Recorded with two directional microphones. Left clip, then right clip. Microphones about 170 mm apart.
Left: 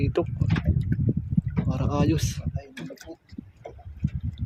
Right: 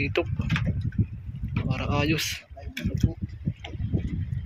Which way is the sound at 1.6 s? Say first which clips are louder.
Right 1 dB; 35° left (ahead or behind).